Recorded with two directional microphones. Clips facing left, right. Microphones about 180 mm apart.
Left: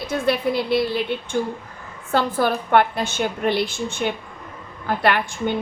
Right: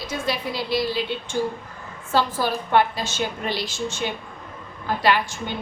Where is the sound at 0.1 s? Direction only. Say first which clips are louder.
Left 7 dB; 60° left (ahead or behind).